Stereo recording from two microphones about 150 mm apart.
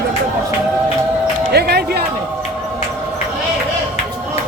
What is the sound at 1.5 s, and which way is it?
Music, 90° right.